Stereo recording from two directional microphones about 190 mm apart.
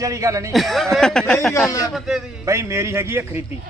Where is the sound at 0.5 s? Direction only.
Centre (ahead or behind).